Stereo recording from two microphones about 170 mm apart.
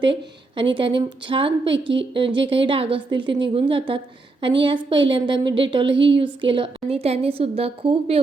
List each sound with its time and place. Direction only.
0.0 s a woman's voice: 30° right (ahead or behind)